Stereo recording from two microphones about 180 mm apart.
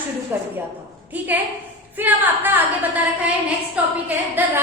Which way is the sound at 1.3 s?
10° right (ahead or behind).